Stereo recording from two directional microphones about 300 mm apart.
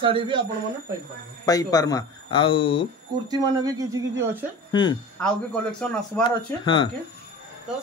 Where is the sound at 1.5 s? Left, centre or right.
Centre.